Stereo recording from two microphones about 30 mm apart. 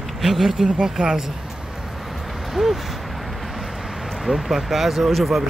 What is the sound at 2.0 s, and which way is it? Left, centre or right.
Vehicle, centre.